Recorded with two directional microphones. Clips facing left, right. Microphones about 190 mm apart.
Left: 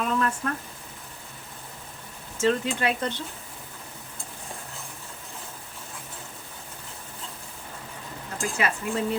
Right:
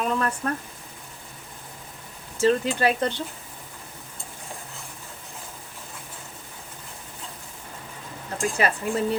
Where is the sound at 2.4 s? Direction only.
35° right (ahead or behind).